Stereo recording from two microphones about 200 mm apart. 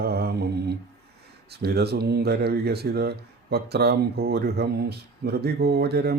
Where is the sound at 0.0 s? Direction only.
50° right (ahead or behind).